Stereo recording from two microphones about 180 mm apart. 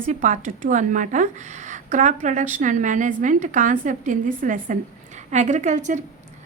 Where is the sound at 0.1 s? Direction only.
45° right (ahead or behind).